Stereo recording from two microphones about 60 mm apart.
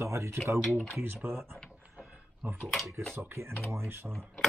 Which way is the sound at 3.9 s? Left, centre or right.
Right.